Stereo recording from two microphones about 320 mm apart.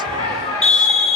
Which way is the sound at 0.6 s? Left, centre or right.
Centre.